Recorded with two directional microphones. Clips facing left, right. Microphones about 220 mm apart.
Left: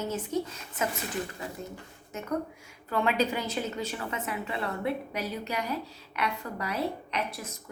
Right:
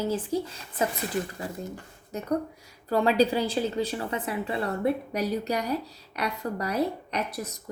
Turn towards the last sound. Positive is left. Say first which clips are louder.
# right 3 dB
turn(degrees=-40)  # may be behind; listen again after turning